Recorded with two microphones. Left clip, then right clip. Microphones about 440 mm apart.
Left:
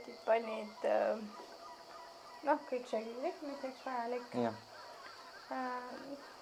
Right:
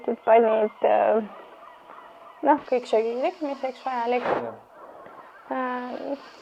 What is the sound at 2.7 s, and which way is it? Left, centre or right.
Speech, right.